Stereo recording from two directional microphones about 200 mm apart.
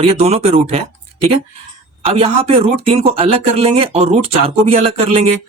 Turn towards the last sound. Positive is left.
turn(degrees=-30)  # may be behind; listen again after turning